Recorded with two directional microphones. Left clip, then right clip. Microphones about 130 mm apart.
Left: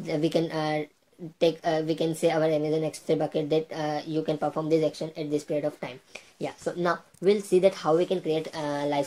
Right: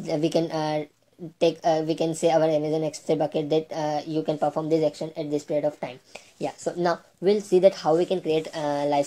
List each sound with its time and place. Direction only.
0.0 s a woman's voice: 20° right (ahead or behind)
7.2 s speech: 10° right (ahead or behind)